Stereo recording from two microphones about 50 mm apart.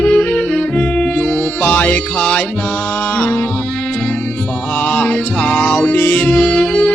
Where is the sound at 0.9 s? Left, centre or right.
Centre.